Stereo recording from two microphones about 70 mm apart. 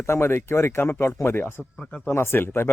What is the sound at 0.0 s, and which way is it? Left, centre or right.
Speech, left.